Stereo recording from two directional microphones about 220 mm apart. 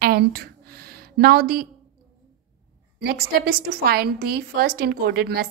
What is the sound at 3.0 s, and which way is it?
A woman's voice, 45° right (ahead or behind).